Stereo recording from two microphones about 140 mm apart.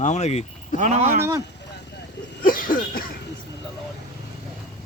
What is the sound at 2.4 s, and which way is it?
Cough, 90° left.